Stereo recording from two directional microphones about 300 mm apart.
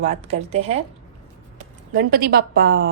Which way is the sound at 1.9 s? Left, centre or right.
Right.